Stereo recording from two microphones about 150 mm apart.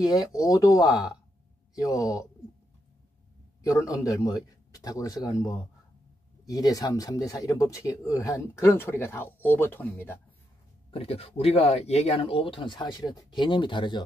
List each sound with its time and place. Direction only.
0.0 s speech: 25° left (ahead or behind)
3.6 s speech: 20° left (ahead or behind)
10.9 s speech: 40° left (ahead or behind)